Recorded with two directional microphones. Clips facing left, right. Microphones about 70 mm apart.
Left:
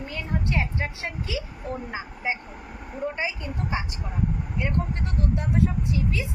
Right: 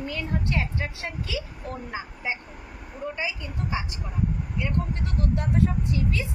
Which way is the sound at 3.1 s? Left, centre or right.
Left.